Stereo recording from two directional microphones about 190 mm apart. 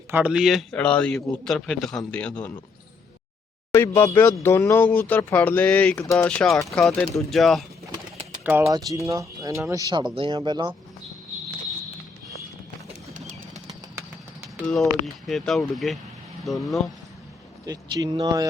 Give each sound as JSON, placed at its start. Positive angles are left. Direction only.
{"t": 0.1, "sound": "a man's voice", "side_deg": -5}
{"t": 3.7, "sound": "a man's voice", "side_deg": 15}
{"t": 8.4, "sound": "speech", "side_deg": -15}
{"t": 13.1, "sound": "bird", "side_deg": -40}
{"t": 14.6, "sound": "a man's voice", "side_deg": 0}
{"t": 17.7, "sound": "speech", "side_deg": -20}